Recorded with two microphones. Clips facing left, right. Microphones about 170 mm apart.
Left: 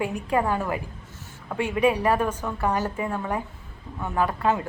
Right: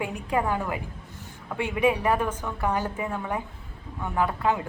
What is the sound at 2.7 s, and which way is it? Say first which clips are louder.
A woman's voice: left 2 dB; 15° right (ahead or behind).